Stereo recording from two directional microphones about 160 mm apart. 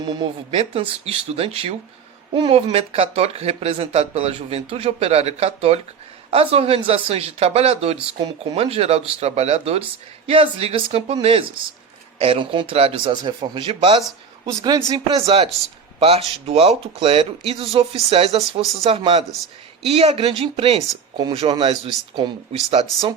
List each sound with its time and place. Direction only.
0.0 s speech: 30° right (ahead or behind)
8.2 s a man's voice: 25° right (ahead or behind)
8.6 s a man's voice: 40° right (ahead or behind)
22.7 s speech: 40° right (ahead or behind)